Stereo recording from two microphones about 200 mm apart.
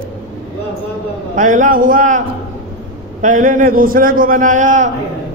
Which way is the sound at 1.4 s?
40° right (ahead or behind).